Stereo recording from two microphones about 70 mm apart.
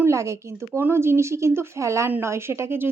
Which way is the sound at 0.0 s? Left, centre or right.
Right.